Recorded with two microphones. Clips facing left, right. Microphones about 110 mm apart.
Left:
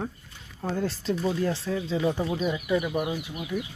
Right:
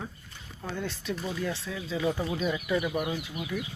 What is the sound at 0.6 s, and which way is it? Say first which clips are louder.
Speech: left 6 dB; 30° left (ahead or behind).